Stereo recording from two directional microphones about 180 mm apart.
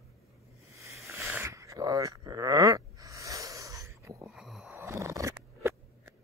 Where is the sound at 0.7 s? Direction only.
15° right (ahead or behind).